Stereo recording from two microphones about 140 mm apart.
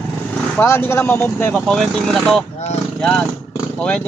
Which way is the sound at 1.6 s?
Centre (ahead or behind).